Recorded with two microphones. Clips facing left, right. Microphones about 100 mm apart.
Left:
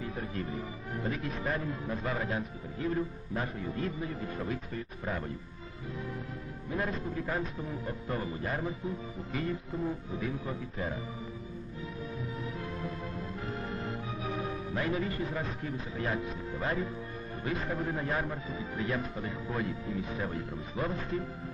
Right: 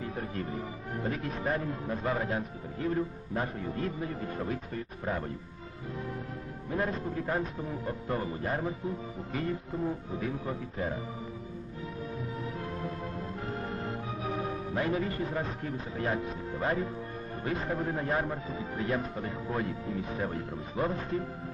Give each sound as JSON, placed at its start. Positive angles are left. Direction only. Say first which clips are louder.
{"t": 0.0, "sound": "a man's voice", "louder": "right 1 dB", "side_deg": -45}
{"t": 6.7, "sound": "a man's voice", "louder": "right 2 dB", "side_deg": -40}
{"t": 11.9, "sound": "music", "louder": "right 2 dB", "side_deg": -45}
{"t": 17.4, "sound": "a man's voice", "louder": "right 1 dB", "side_deg": -40}